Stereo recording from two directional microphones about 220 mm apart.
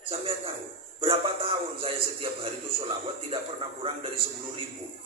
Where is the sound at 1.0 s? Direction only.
25° right (ahead or behind).